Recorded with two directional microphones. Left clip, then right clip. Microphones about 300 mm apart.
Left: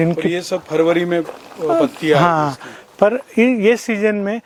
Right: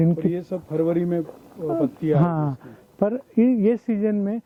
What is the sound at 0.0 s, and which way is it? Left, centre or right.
Speech, centre.